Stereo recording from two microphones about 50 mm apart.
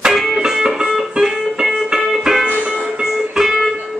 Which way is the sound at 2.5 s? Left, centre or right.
Right.